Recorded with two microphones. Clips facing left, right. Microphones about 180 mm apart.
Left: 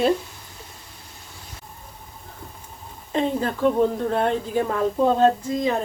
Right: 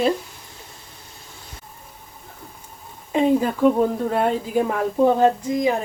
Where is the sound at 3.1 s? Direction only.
10° right (ahead or behind).